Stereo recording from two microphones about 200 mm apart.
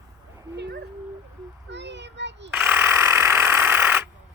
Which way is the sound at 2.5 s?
10° right (ahead or behind).